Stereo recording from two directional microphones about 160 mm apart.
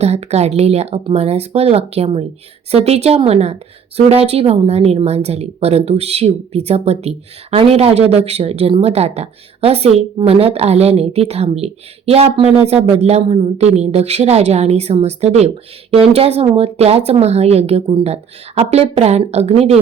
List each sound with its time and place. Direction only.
0.0 s speech: 40° right (ahead or behind)